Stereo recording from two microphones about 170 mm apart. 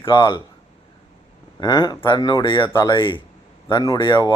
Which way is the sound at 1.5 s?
25° left (ahead or behind).